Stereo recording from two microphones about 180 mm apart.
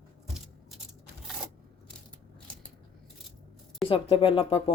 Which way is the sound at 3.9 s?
30° left (ahead or behind).